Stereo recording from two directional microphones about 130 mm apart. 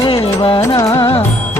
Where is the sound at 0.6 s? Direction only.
25° left (ahead or behind).